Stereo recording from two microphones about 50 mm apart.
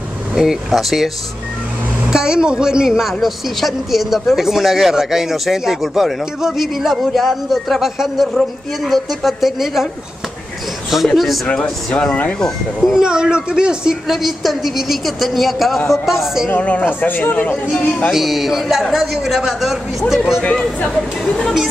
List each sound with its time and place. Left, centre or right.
0.3 s a woman's voice: centre
2.0 s a woman's voice: centre
11.1 s a woman's voice: centre
11.4 s speech: centre
12.1 s speech: left
13.0 s speech: centre
14.0 s a woman's voice: centre
16.4 s speech: left
18.1 s a woman's voice: centre